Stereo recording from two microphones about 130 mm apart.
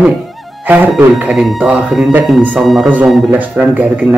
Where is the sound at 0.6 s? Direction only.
10° right (ahead or behind).